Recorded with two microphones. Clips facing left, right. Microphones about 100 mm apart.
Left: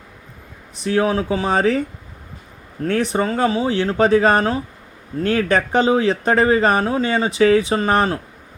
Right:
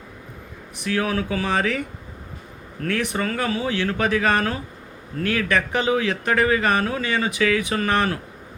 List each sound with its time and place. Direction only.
0.8 s speech: 30° left (ahead or behind)
2.8 s speech: 30° left (ahead or behind)